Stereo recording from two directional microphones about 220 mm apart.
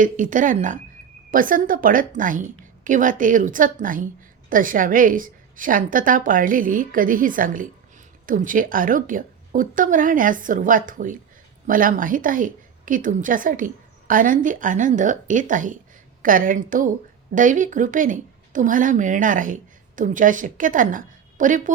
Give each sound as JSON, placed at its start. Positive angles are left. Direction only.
{"t": 0.0, "sound": "a woman's voice", "side_deg": -35}